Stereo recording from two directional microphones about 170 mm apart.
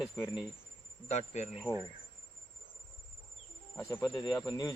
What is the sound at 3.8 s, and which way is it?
Speech, 15° left (ahead or behind).